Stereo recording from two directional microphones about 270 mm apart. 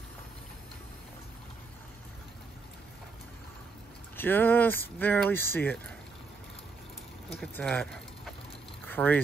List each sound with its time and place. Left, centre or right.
4.2 s speech: centre
7.2 s speech: centre